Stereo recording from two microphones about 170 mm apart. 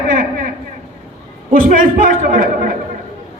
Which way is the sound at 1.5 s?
55° right (ahead or behind).